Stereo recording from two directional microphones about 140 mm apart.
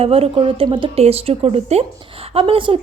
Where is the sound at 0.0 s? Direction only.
45° right (ahead or behind).